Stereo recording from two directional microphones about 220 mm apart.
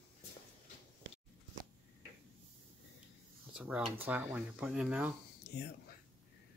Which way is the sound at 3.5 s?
5° right (ahead or behind).